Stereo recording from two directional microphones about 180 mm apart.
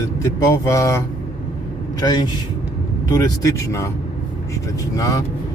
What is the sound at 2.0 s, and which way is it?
Speech, 25° left (ahead or behind).